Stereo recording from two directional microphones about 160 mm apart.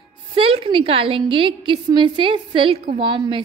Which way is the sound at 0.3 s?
35° right (ahead or behind).